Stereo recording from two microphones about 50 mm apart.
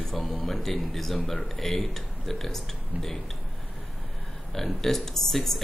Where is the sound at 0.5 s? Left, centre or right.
Centre.